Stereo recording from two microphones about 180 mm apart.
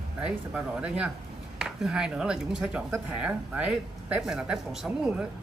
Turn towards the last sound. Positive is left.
turn(degrees=-5)  # may be behind; listen again after turning